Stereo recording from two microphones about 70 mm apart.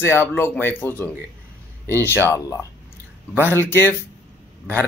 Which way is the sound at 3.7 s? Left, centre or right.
Left.